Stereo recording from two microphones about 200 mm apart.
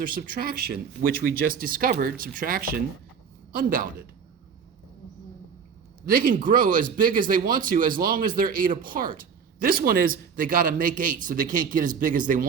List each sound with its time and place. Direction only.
0.0 s speech: 45° right (ahead or behind)
6.1 s speech: 45° right (ahead or behind)